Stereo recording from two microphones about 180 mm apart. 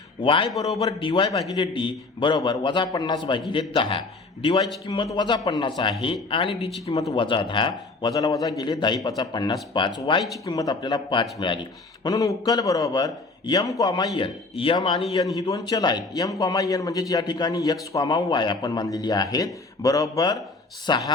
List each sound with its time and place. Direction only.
0.2 s a man's voice: 30° left (ahead or behind)